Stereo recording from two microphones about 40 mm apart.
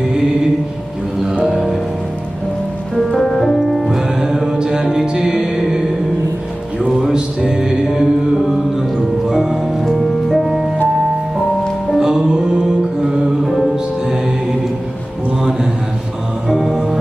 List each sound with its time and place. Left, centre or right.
1.4 s music: centre
3.1 s music: centre
4.2 s music: centre
7.0 s music: centre
9.3 s music: centre
12.0 s music: centre
13.4 s music: centre
16.4 s music: centre